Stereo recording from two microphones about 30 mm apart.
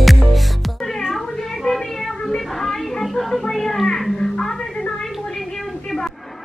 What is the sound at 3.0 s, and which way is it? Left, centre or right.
Music, centre.